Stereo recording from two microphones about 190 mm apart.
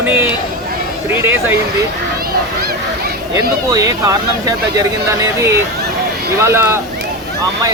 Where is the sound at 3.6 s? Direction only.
20° right (ahead or behind).